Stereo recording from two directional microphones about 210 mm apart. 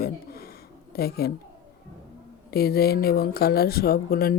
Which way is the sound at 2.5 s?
50° left (ahead or behind).